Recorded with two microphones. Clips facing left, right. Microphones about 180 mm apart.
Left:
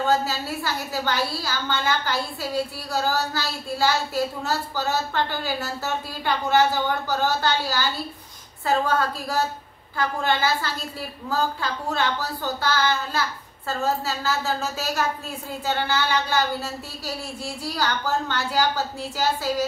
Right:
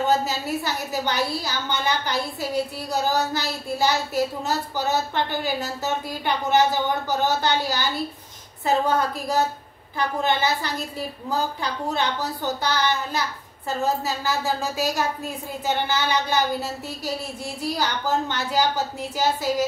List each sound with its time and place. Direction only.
0.0 s a woman's voice: 20° right (ahead or behind)